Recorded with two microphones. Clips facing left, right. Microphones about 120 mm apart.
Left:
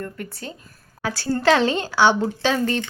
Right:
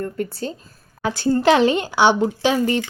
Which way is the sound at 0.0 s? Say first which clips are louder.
Right 7 dB; 30° right (ahead or behind).